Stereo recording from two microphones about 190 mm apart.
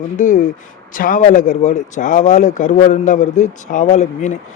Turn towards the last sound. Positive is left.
turn(degrees=40)  # may be behind; listen again after turning